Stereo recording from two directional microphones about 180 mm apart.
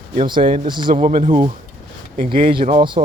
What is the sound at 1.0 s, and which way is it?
Speech, 45° right (ahead or behind).